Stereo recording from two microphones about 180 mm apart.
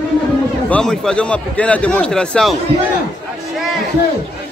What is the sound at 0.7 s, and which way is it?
A man's voice, 5° left (ahead or behind).